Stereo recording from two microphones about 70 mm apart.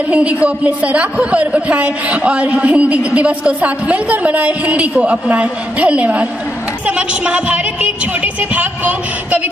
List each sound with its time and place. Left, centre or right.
0.1 s a man's voice: centre